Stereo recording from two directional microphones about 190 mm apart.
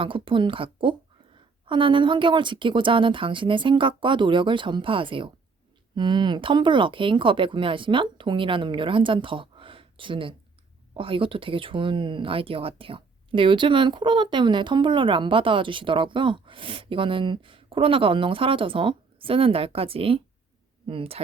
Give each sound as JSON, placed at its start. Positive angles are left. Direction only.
{"t": 0.0, "sound": "speech", "side_deg": -25}